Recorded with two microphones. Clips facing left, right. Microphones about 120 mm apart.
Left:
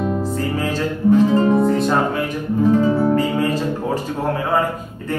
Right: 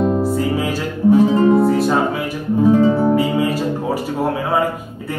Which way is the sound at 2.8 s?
25° right (ahead or behind).